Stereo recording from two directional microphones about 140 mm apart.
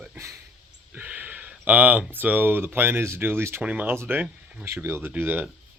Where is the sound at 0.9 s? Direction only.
15° right (ahead or behind).